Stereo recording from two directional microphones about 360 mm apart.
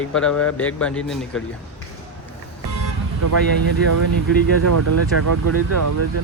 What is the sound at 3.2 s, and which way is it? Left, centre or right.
Speech, right.